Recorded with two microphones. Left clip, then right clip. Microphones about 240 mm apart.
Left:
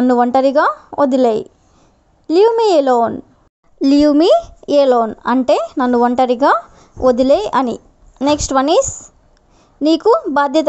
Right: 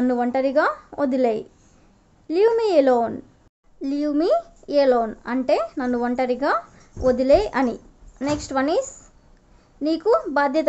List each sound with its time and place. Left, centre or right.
0.0 s speech: left
3.8 s speech: left